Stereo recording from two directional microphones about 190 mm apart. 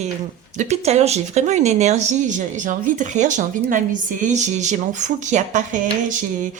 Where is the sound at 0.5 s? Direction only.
35° right (ahead or behind).